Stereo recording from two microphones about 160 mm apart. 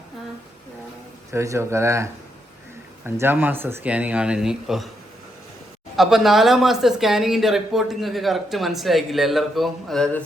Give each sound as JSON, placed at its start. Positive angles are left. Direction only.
{"t": 1.3, "sound": "speech", "side_deg": -20}
{"t": 3.2, "sound": "speech", "side_deg": -15}
{"t": 6.0, "sound": "speech", "side_deg": 0}